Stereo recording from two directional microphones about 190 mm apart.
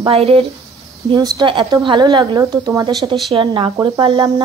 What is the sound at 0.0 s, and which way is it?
Speech, 30° right (ahead or behind).